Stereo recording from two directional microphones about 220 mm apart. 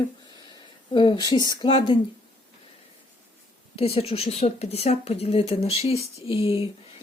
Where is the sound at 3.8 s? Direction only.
25° left (ahead or behind).